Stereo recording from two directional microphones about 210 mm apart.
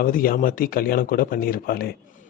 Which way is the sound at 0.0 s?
40° left (ahead or behind).